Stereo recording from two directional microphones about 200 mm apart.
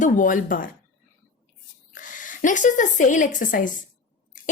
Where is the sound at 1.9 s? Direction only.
40° left (ahead or behind).